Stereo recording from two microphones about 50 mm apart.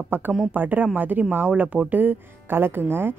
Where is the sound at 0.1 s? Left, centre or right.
Right.